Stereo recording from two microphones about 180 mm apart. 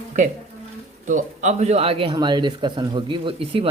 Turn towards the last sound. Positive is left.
turn(degrees=-30)  # may be behind; listen again after turning